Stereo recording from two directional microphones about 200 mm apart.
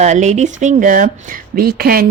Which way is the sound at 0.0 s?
35° right (ahead or behind).